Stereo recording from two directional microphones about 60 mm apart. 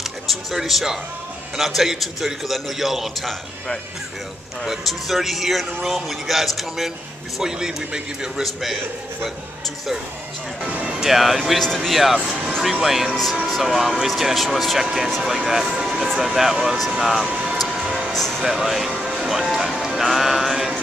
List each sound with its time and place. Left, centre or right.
0.3 s a man's voice: centre
4.6 s a man's voice: centre
10.6 s music: right
11.0 s a man's voice: centre
11.6 s speech: centre
11.9 s a man's voice: centre
17.9 s music: centre
18.4 s speech: centre